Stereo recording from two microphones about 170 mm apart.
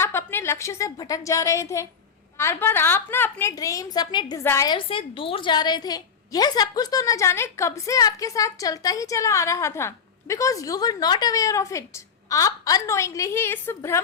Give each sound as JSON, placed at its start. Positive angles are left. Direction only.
{"t": 0.0, "sound": "a woman's voice", "side_deg": 15}